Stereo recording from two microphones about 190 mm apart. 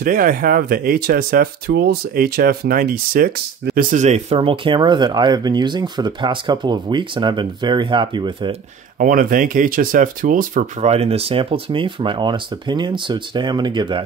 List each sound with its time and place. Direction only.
0.0 s speech: 45° right (ahead or behind); by 8.5 s 25° right (ahead or behind)
9.0 s speech: 45° right (ahead or behind); by 14.0 s 25° right (ahead or behind)